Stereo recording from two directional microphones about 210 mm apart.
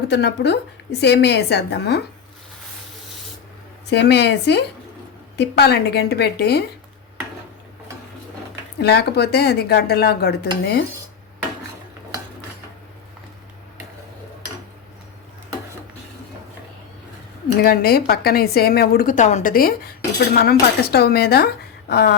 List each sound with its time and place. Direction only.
0.1 s a woman's voice: 55° left (ahead or behind)
3.8 s a woman's voice: 55° left (ahead or behind)
8.8 s a woman's voice: 50° left (ahead or behind)
17.6 s a woman's voice: 45° left (ahead or behind)